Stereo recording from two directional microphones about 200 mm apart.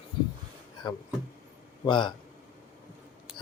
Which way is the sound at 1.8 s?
25° left (ahead or behind).